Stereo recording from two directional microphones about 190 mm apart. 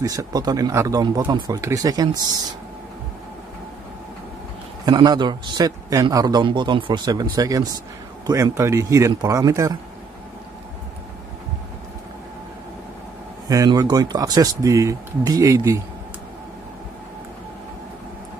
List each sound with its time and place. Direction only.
0.0 s a man's voice: 20° right (ahead or behind)
4.8 s a man's voice: 20° right (ahead or behind)
13.5 s a man's voice: 20° right (ahead or behind)